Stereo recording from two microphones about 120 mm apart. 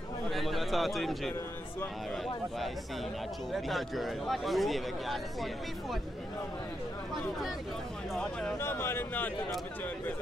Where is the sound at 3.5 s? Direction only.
Centre (ahead or behind).